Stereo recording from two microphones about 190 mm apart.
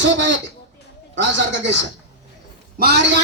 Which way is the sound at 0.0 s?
75° right (ahead or behind).